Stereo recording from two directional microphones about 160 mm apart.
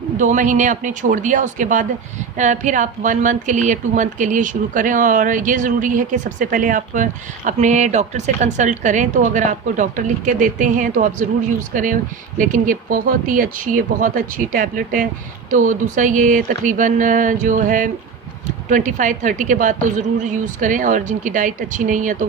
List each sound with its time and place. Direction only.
0.2 s a woman's voice: 50° right (ahead or behind)